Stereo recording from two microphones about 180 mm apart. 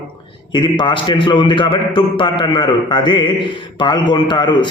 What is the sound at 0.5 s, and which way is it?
A man's voice, 25° left (ahead or behind).